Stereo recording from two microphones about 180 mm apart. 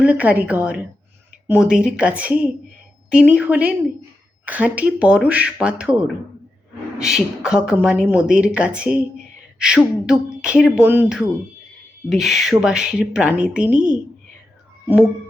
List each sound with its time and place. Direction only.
0.0 s speech: 10° right (ahead or behind)